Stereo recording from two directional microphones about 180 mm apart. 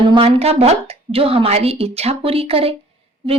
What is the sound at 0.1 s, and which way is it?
A woman's voice, 30° right (ahead or behind).